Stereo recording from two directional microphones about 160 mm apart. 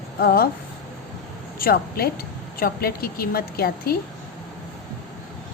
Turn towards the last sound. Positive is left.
turn(degrees=70)  # may be behind; listen again after turning